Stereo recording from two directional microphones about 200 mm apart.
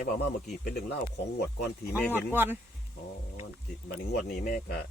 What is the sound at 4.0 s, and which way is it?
Speech, 55° left (ahead or behind).